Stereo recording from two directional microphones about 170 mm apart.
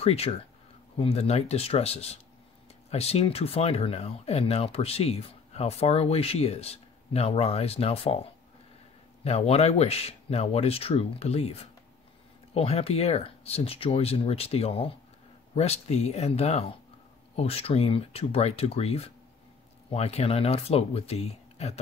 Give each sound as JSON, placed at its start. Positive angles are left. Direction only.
{"t": 0.0, "sound": "speech", "side_deg": 35}
{"t": 9.2, "sound": "speech", "side_deg": 40}